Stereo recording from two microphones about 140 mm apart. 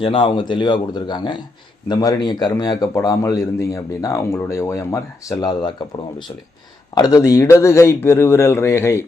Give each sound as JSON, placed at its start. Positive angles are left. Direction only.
{"t": 0.0, "sound": "speech", "side_deg": 40}
{"t": 6.9, "sound": "speech", "side_deg": 25}